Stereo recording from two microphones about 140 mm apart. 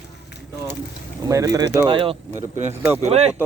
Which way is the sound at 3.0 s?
50° right (ahead or behind).